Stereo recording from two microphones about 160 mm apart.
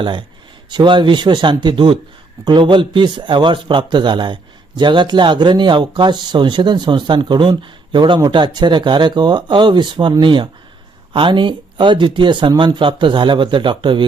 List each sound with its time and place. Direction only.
0.0 s speech: 30° right (ahead or behind)